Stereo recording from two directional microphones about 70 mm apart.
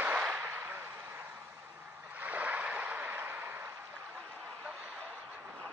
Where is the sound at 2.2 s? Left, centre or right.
Right.